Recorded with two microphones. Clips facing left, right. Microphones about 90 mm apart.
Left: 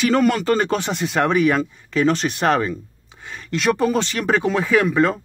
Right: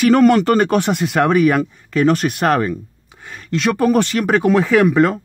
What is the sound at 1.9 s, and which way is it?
Speech, 50° right (ahead or behind).